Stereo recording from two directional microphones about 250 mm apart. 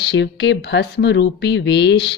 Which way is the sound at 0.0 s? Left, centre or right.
Left.